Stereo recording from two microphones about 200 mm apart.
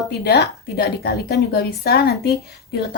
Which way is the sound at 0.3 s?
55° left (ahead or behind).